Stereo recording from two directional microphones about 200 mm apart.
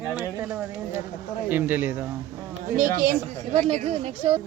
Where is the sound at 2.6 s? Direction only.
40° right (ahead or behind).